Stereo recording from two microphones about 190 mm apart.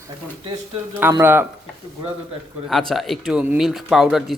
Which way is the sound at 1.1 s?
10° right (ahead or behind).